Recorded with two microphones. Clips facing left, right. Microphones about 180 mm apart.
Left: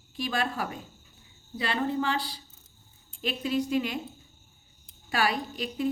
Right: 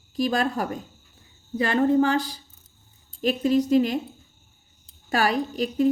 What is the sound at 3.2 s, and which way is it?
Speech, 40° right (ahead or behind).